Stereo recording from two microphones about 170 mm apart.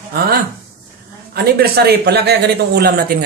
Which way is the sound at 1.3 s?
70° right (ahead or behind).